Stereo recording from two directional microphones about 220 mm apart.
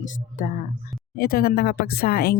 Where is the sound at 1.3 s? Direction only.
45° left (ahead or behind).